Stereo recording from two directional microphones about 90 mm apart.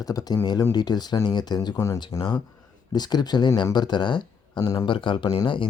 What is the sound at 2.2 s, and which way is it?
Speech, 55° left (ahead or behind).